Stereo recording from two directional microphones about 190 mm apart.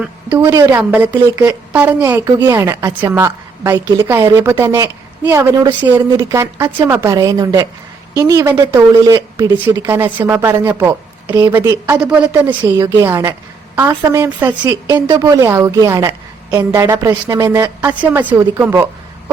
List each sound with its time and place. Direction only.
0.3 s speech: 15° right (ahead or behind)